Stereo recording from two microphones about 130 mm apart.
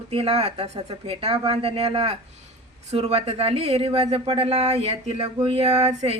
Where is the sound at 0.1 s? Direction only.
50° right (ahead or behind).